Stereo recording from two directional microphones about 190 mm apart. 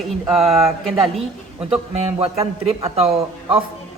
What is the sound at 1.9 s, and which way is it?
A man's voice, 30° right (ahead or behind).